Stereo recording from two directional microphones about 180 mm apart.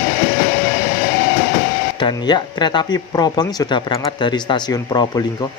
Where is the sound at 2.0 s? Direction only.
25° left (ahead or behind).